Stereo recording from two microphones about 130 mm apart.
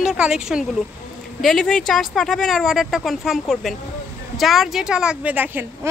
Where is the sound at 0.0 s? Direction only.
5° right (ahead or behind).